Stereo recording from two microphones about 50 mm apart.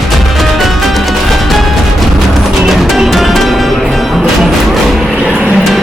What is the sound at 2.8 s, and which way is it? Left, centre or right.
Music, centre.